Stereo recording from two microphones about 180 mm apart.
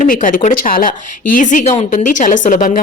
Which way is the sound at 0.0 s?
50° left (ahead or behind).